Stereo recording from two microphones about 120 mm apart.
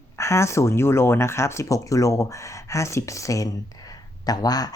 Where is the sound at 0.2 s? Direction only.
25° left (ahead or behind).